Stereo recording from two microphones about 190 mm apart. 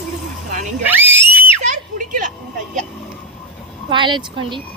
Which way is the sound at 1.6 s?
40° right (ahead or behind).